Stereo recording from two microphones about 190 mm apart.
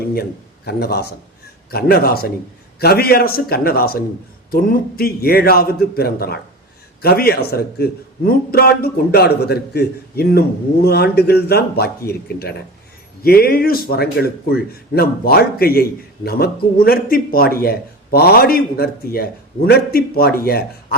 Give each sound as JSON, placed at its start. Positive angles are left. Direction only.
{"t": 0.0, "sound": "a man's voice", "side_deg": 55}